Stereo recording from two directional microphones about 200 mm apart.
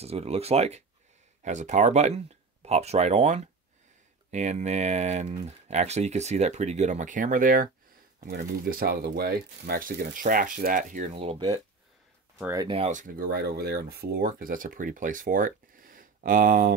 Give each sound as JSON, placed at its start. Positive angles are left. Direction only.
{"t": 0.0, "sound": "speech", "side_deg": -30}
{"t": 12.7, "sound": "speech", "side_deg": -35}